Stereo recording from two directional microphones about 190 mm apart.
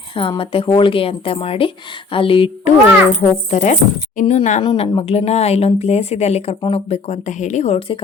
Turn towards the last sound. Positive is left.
turn(degrees=35)  # may be behind; listen again after turning